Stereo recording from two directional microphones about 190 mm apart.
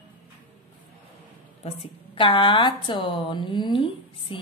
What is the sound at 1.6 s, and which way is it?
A woman's voice, 25° left (ahead or behind).